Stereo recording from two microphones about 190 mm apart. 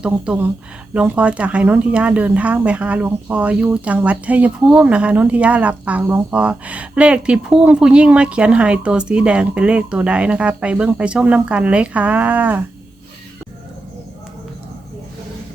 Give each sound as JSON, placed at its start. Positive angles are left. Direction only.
{"t": 0.0, "sound": "speech", "side_deg": -10}